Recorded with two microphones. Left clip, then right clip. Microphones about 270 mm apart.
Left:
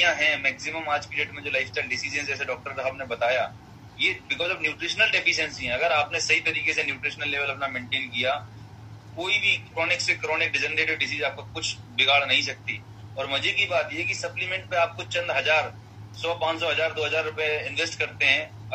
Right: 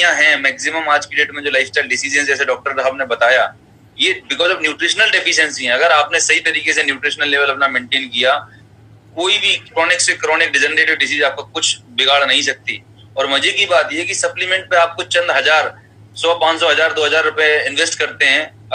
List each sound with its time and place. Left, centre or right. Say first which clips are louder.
0.0 s a man's voice: right 10 dB; right